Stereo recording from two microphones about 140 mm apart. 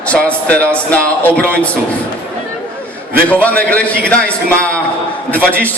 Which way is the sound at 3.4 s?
10° left (ahead or behind).